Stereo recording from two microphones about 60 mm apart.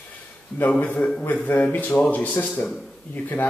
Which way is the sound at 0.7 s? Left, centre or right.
Centre.